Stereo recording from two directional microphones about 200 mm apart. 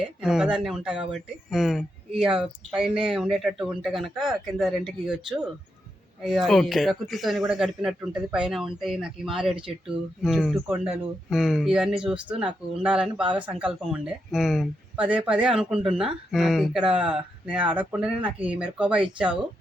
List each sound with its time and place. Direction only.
0.0 s speech: 5° right (ahead or behind)